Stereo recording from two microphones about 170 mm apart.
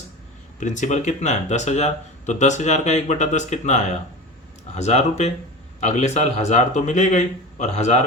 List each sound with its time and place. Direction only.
0.6 s speech: 45° left (ahead or behind)